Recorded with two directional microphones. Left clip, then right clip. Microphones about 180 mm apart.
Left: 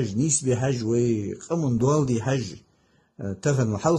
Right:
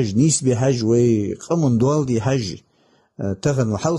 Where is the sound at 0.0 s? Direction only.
35° right (ahead or behind).